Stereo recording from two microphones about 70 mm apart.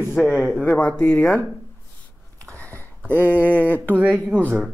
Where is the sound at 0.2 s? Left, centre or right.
Centre.